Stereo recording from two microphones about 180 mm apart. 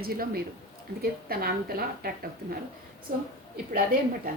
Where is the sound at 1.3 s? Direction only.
55° right (ahead or behind).